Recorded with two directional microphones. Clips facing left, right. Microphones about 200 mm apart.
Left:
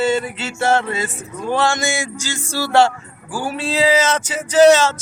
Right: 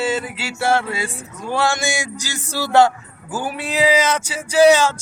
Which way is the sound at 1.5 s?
10° right (ahead or behind).